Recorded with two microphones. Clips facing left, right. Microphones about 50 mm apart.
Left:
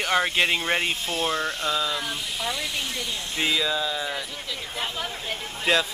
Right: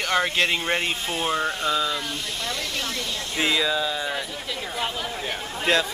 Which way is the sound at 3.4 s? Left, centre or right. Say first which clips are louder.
Right 2 dB; centre.